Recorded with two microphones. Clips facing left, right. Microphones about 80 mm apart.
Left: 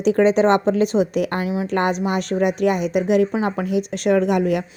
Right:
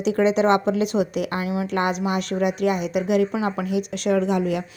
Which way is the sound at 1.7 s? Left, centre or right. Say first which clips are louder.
Left 3 dB; left.